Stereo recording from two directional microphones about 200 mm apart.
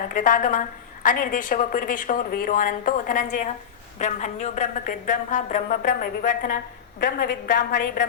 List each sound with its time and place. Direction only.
0.1 s a woman's voice: 40° left (ahead or behind)